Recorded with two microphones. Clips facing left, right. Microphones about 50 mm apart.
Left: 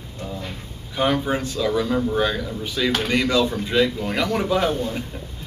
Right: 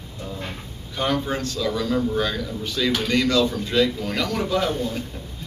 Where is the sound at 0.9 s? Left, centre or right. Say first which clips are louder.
Left 3 dB; centre.